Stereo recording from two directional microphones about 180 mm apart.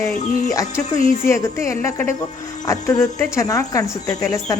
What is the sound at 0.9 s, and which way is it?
Speech, 45° left (ahead or behind).